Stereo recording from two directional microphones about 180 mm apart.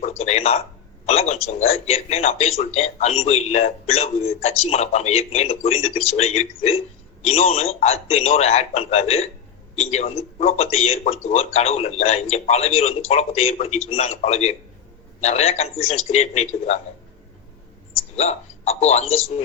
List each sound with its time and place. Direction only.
0.0 s a man's voice: 35° left (ahead or behind)
18.1 s a man's voice: 35° left (ahead or behind)